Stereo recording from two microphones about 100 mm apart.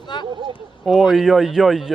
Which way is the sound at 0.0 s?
50° left (ahead or behind).